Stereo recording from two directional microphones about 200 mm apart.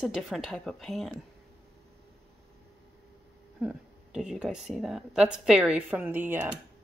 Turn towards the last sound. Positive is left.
turn(degrees=-10)  # may be behind; listen again after turning